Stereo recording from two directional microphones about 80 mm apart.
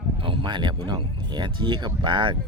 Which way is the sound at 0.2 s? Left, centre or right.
Right.